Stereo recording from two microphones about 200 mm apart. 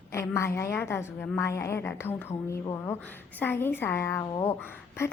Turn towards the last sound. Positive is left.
turn(degrees=10)  # may be behind; listen again after turning